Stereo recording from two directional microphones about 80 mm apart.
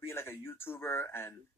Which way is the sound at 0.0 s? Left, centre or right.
Left.